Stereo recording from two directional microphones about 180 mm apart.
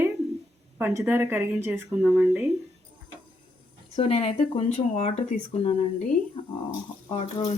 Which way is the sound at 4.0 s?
30° left (ahead or behind).